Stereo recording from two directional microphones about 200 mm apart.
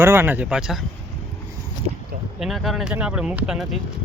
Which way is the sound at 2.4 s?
Centre (ahead or behind).